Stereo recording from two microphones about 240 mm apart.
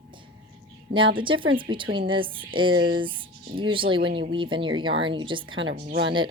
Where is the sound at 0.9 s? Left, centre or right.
Right.